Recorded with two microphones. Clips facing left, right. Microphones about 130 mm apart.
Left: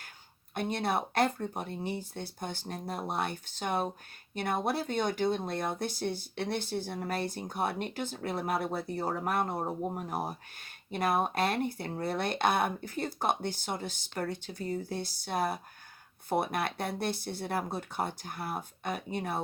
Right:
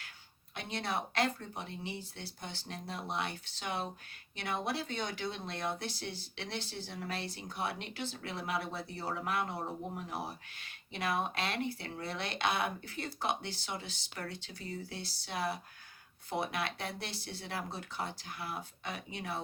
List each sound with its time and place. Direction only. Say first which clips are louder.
0.5 s speech: left 6 dB; 50° left (ahead or behind)